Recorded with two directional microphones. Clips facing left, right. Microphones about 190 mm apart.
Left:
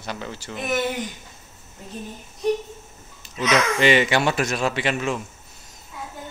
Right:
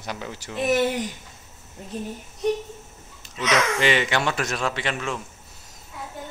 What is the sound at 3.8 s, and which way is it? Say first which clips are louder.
Speech: left 4 dB; 5° left (ahead or behind).